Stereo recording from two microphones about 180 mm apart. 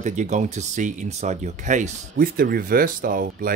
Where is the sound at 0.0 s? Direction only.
40° right (ahead or behind).